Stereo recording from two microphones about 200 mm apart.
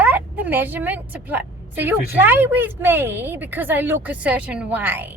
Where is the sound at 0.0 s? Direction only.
10° right (ahead or behind).